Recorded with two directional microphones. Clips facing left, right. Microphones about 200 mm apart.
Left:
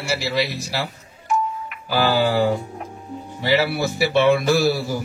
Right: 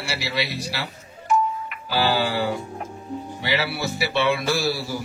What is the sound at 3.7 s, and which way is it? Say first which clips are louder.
Speech: left 5 dB; 45° left (ahead or behind).